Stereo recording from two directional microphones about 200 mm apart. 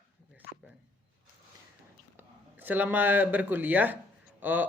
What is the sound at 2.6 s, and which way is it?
A man's voice, 10° right (ahead or behind).